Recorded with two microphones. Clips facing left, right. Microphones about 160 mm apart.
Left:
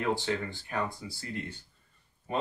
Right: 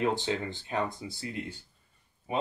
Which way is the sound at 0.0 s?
20° right (ahead or behind).